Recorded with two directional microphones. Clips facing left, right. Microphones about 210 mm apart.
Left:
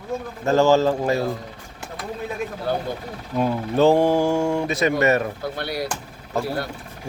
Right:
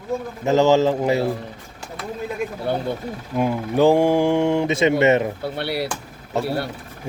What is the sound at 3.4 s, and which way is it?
Speech, 15° right (ahead or behind).